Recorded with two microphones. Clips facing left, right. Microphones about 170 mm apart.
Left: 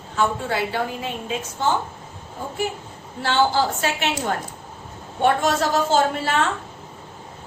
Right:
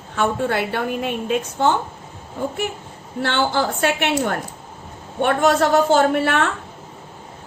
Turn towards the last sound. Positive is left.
turn(degrees=-60)  # may be behind; listen again after turning